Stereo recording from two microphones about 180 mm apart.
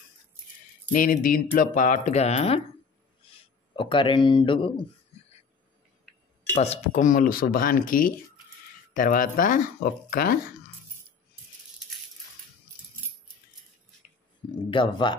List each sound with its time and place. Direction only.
0.9 s speech: 50° left (ahead or behind)
3.7 s speech: 30° left (ahead or behind)
6.5 s speech: 40° left (ahead or behind)
14.5 s speech: 25° left (ahead or behind)